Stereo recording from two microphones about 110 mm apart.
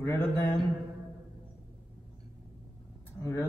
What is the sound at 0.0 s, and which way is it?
Speech, 25° left (ahead or behind).